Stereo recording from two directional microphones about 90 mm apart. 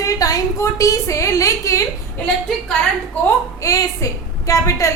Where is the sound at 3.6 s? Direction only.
40° left (ahead or behind).